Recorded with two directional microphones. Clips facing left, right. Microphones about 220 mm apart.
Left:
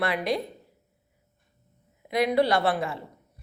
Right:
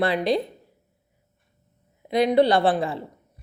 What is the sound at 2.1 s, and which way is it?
Speech, 30° right (ahead or behind).